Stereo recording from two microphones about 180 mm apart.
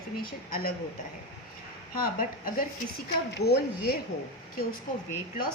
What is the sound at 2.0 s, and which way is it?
Speech, 55° left (ahead or behind).